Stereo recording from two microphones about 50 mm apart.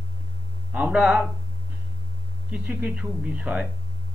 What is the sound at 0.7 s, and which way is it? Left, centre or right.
Speech, right.